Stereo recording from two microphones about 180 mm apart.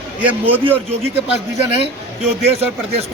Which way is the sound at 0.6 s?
35° right (ahead or behind).